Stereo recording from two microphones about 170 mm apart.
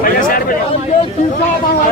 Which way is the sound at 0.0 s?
55° left (ahead or behind).